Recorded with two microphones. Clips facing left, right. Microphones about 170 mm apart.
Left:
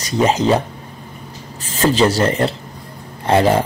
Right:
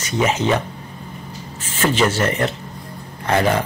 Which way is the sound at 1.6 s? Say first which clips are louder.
Left 4 dB; 35° left (ahead or behind).